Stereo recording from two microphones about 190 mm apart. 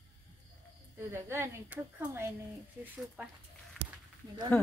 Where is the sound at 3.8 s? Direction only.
5° left (ahead or behind).